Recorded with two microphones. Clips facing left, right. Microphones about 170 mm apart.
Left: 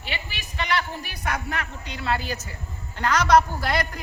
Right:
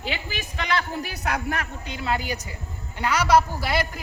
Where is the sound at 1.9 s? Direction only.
20° right (ahead or behind).